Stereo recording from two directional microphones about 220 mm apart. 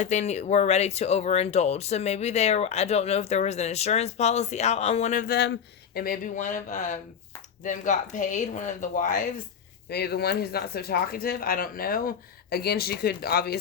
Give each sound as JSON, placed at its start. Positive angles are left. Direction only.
{"t": 0.0, "sound": "speech", "side_deg": 30}